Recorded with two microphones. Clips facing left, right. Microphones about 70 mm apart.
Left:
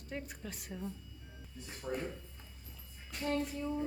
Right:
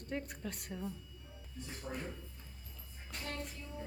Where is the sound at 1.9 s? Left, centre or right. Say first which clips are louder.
Left 5 dB; centre.